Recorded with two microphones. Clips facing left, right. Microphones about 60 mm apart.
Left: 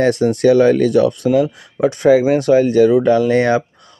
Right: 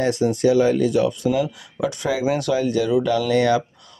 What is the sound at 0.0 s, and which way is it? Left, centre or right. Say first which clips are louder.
Speech: left 5 dB; left.